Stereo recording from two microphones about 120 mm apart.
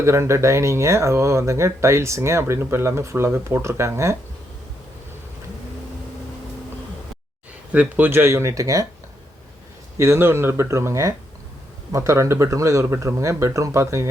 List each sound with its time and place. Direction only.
0.0 s speech: 25° right (ahead or behind)
7.7 s speech: 10° right (ahead or behind); by 8.9 s 30° right (ahead or behind)
10.0 s speech: 20° right (ahead or behind)